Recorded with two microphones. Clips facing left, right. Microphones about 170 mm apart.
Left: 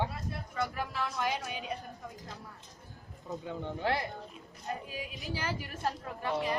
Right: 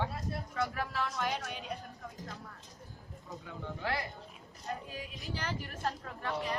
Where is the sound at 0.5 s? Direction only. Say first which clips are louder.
Left 1 dB; centre (ahead or behind).